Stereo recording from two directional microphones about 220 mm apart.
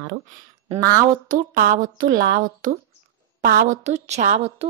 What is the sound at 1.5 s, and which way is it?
A woman's voice, 40° right (ahead or behind).